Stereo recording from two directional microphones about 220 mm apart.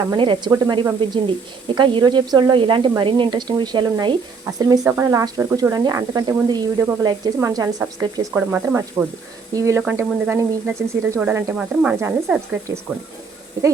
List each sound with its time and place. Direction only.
0.1 s a woman's voice: 20° right (ahead or behind)